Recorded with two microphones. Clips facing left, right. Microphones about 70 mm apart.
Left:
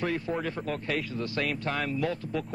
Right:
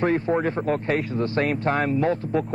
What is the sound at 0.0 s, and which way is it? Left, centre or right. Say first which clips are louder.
Speech: right 9 dB; right.